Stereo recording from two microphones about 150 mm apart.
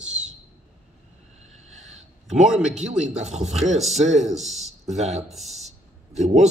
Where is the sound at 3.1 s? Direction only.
50° right (ahead or behind).